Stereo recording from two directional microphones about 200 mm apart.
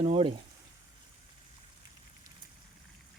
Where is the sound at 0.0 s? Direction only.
25° right (ahead or behind).